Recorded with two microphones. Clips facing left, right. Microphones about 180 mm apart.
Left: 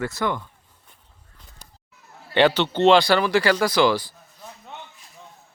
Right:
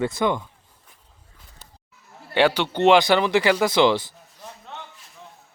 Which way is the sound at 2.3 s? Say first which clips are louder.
Left 1 dB; 10° right (ahead or behind).